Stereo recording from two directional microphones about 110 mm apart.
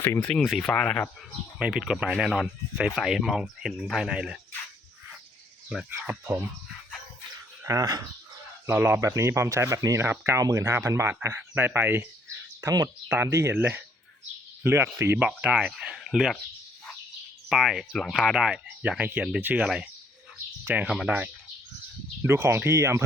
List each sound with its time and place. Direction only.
0.0 s speech: 25° left (ahead or behind)
0.3 s speech: 5° left (ahead or behind)
1.5 s speech: 5° right (ahead or behind)
5.6 s speech: centre (ahead or behind)
7.6 s speech: 30° right (ahead or behind)
8.6 s speech: 20° right (ahead or behind)
12.6 s speech: 30° right (ahead or behind)
13.1 s speech: 20° right (ahead or behind)
15.3 s speech: 10° right (ahead or behind)
17.5 s speech: 5° right (ahead or behind)
19.6 s speech: 5° right (ahead or behind)
22.2 s speech: 25° right (ahead or behind)